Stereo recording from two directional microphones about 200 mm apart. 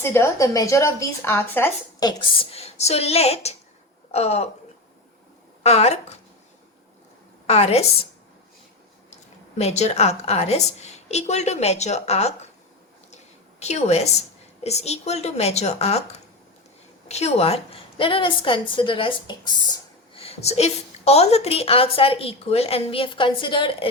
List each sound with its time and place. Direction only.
0.0 s speech: 10° left (ahead or behind)
2.0 s a woman's voice: 25° left (ahead or behind)
5.6 s a woman's voice: 30° left (ahead or behind)
7.4 s a woman's voice: 30° left (ahead or behind)
9.6 s a woman's voice: 35° left (ahead or behind)
13.6 s a woman's voice: 35° left (ahead or behind)